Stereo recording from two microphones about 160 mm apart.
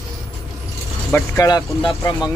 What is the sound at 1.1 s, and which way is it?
Speech, 20° left (ahead or behind).